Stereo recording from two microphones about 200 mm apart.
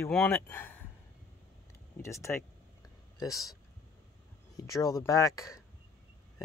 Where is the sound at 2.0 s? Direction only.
15° left (ahead or behind).